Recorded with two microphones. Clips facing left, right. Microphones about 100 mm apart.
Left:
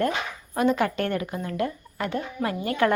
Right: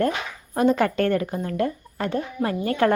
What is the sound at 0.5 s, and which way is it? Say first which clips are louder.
Speech: right 3 dB; 35° right (ahead or behind).